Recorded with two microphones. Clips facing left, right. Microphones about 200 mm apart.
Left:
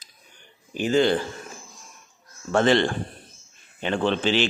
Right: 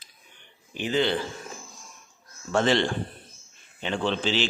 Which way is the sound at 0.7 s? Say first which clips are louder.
Left 5 dB; 45° left (ahead or behind).